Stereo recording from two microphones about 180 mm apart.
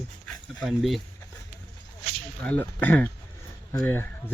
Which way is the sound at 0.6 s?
Centre (ahead or behind).